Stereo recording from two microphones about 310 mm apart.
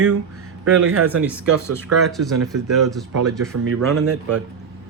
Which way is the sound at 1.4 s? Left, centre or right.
Right.